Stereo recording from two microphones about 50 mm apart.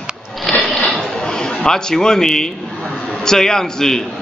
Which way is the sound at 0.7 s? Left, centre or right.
Centre.